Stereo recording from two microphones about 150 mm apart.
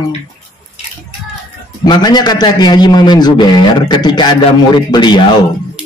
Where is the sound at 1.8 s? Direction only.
30° left (ahead or behind).